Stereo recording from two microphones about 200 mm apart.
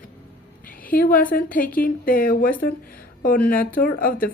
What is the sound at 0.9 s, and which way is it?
Speech, 45° left (ahead or behind).